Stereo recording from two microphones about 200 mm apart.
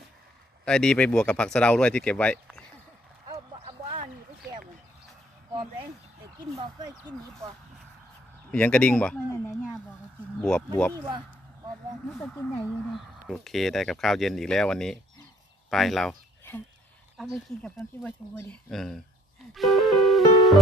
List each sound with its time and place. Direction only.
0.7 s speech: 5° left (ahead or behind)
3.5 s a sound: 30° right (ahead or behind)
6.5 s speech: 20° right (ahead or behind)
8.5 s speech: 5° left (ahead or behind)
12.1 s speech: centre (ahead or behind)
17.5 s speech: 5° left (ahead or behind)
19.5 s music: centre (ahead or behind)